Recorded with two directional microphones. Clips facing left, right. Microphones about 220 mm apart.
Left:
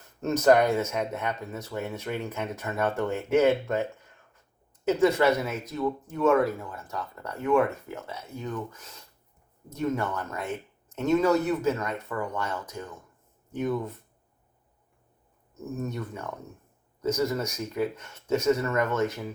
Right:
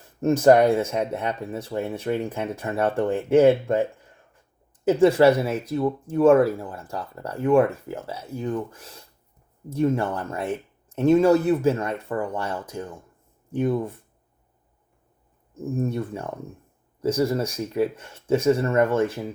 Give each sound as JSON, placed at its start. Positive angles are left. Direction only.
{"t": 0.2, "sound": "speech", "side_deg": -30}
{"t": 4.9, "sound": "speech", "side_deg": -30}
{"t": 15.5, "sound": "speech", "side_deg": -30}